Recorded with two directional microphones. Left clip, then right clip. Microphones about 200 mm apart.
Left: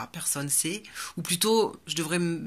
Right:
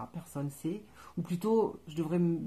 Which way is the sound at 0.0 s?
40° left (ahead or behind).